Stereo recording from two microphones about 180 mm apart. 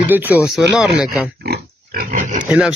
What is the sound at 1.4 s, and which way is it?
Pig, 55° right (ahead or behind).